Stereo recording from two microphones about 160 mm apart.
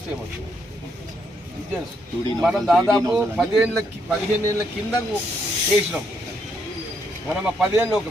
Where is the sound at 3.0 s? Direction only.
20° right (ahead or behind).